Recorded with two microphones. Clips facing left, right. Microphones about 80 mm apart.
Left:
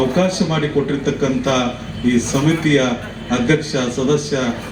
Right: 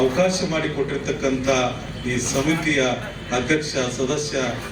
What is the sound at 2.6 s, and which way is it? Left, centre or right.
A man's voice, left.